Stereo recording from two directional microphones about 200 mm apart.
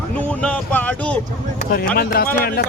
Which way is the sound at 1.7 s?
50° left (ahead or behind).